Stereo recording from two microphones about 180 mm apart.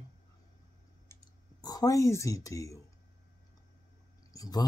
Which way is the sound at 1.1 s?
15° left (ahead or behind).